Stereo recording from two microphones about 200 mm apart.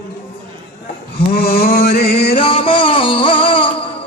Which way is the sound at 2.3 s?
25° left (ahead or behind).